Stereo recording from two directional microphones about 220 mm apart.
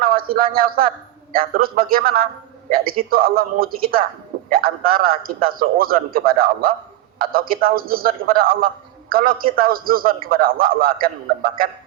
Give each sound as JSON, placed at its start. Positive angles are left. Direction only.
{"t": 0.0, "sound": "a man's voice", "side_deg": -40}